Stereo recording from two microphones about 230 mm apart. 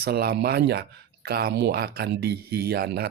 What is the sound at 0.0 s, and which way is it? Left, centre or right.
Speech, right.